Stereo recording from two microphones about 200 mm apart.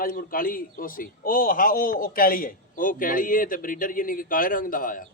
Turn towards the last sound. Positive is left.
turn(degrees=45)  # may be behind; listen again after turning